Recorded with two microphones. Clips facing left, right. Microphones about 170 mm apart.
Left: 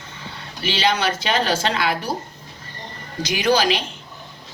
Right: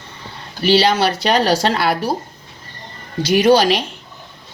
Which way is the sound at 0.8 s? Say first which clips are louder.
Right 5 dB; 35° right (ahead or behind).